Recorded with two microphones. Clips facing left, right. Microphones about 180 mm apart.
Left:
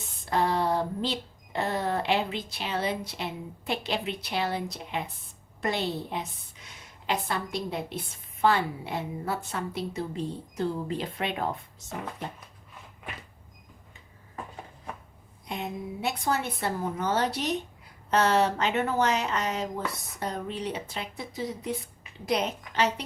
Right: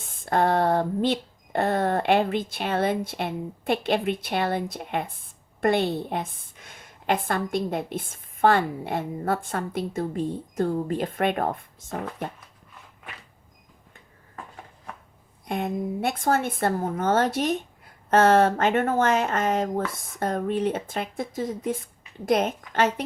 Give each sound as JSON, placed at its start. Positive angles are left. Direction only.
{"t": 0.0, "sound": "speech", "side_deg": -50}
{"t": 15.4, "sound": "speech", "side_deg": -50}